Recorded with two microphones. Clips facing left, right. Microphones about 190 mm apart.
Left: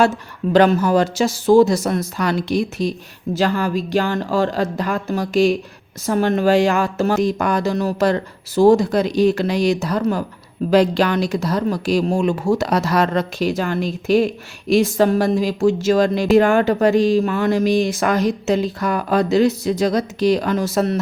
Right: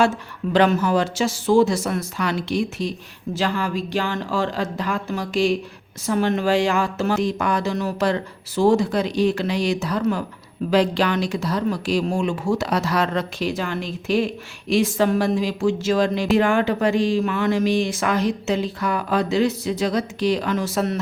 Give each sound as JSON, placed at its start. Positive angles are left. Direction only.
{"t": 0.5, "sound": "speech", "side_deg": 40}